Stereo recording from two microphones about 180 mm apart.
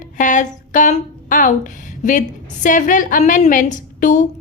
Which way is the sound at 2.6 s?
45° left (ahead or behind).